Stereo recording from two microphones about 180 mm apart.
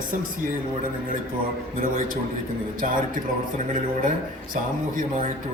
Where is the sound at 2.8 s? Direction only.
50° right (ahead or behind).